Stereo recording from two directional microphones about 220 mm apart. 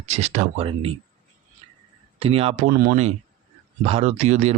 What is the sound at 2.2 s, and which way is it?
Speech, 25° right (ahead or behind).